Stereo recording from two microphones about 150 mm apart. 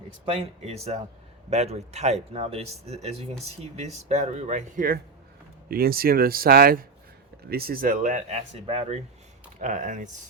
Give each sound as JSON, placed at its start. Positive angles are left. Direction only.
{"t": 0.3, "sound": "speech", "side_deg": -45}
{"t": 5.6, "sound": "speech", "side_deg": -80}
{"t": 9.6, "sound": "speech", "side_deg": -55}